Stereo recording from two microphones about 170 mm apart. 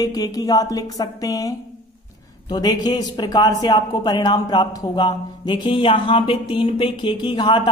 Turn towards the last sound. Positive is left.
turn(degrees=25)  # may be behind; listen again after turning